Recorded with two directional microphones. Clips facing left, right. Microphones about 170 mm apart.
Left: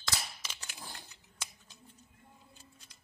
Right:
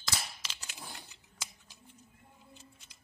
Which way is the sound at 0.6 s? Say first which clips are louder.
Right 2 dB; 10° right (ahead or behind).